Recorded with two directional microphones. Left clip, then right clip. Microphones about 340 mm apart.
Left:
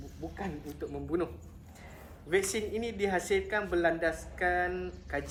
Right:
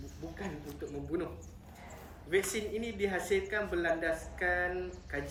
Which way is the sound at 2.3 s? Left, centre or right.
Centre.